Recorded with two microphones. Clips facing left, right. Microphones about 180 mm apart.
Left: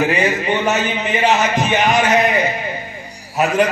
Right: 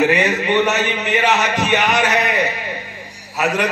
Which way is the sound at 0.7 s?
70° right (ahead or behind).